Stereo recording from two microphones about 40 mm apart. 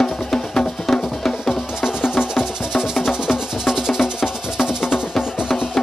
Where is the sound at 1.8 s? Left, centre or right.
Centre.